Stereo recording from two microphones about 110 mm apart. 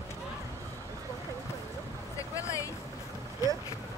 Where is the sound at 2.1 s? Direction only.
30° left (ahead or behind).